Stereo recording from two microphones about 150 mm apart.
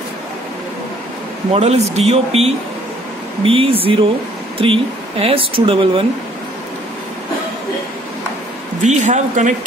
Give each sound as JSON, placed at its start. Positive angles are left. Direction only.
{"t": 1.5, "sound": "speech", "side_deg": -45}
{"t": 8.8, "sound": "speech", "side_deg": -50}